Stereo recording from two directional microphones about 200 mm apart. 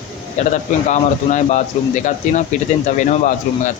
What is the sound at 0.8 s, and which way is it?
Speech, 35° left (ahead or behind).